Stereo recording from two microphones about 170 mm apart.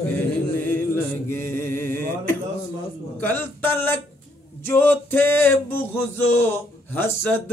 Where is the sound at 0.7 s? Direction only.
15° left (ahead or behind).